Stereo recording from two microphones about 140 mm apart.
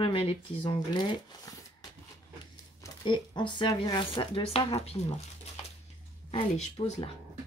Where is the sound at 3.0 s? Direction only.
35° left (ahead or behind).